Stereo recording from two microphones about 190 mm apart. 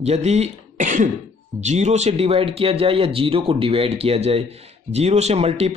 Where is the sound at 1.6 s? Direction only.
35° right (ahead or behind).